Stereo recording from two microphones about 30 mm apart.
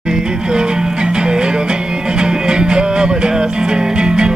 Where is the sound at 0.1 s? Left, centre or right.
Right.